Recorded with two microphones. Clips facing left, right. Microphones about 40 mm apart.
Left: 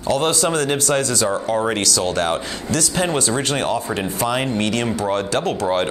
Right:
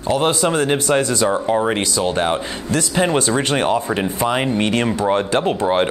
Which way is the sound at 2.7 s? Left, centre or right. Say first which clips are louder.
Right 3 dB; right.